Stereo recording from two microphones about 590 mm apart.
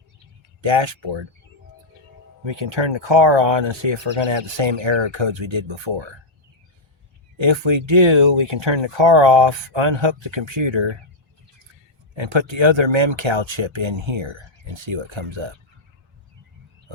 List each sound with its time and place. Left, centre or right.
0.6 s speech: right
2.4 s speech: right
7.3 s speech: right
12.1 s speech: right